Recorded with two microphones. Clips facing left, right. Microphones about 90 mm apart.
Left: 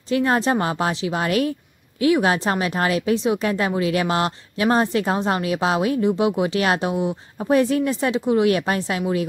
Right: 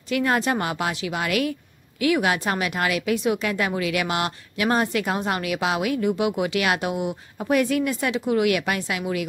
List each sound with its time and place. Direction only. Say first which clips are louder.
0.1 s a woman's voice: left 3 dB; 30° left (ahead or behind)